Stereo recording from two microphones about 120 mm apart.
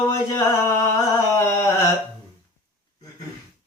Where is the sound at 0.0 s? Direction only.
25° left (ahead or behind).